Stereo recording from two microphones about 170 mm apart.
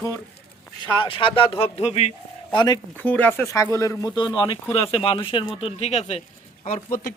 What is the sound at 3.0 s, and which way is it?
Speech, 10° left (ahead or behind).